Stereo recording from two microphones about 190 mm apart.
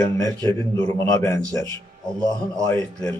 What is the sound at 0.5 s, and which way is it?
Speech, 15° left (ahead or behind).